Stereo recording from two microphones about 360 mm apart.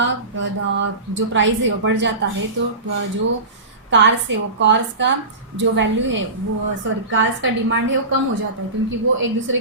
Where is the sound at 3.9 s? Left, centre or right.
Right.